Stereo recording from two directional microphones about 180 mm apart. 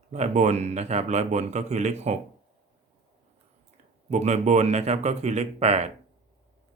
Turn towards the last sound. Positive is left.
turn(degrees=-35)  # may be behind; listen again after turning